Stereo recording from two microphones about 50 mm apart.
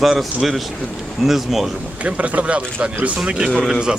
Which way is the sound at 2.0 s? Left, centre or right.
Right.